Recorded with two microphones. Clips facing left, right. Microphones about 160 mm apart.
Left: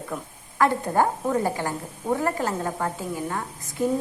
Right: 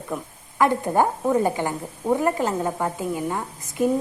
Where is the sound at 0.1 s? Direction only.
10° right (ahead or behind).